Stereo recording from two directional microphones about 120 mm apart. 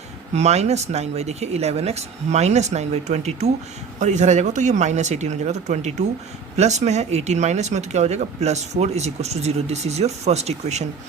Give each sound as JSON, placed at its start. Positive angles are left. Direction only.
{"t": 0.3, "sound": "speech", "side_deg": -65}
{"t": 4.0, "sound": "speech", "side_deg": -80}